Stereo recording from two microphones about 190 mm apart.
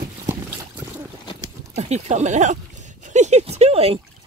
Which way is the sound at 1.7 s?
35° right (ahead or behind).